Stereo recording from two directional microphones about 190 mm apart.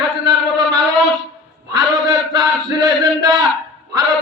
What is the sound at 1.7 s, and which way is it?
Chant, 20° right (ahead or behind).